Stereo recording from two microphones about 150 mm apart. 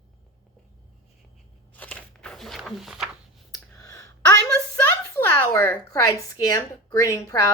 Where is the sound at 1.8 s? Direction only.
10° left (ahead or behind).